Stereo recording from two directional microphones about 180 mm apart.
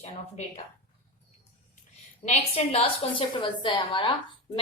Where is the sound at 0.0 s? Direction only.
40° left (ahead or behind).